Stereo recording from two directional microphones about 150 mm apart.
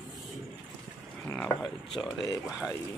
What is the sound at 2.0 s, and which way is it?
Speech, 25° left (ahead or behind).